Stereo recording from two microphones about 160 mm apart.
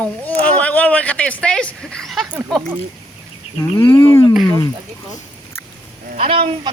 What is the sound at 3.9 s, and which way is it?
Speech, 20° left (ahead or behind).